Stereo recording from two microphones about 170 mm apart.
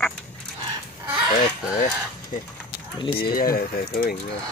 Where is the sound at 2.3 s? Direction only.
45° left (ahead or behind).